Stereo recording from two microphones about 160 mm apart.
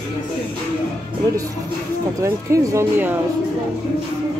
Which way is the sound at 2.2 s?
20° right (ahead or behind).